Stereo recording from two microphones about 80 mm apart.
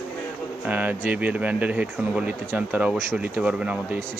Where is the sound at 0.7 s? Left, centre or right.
Centre.